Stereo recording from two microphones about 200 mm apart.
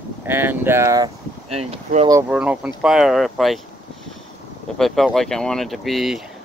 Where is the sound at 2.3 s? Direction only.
5° right (ahead or behind).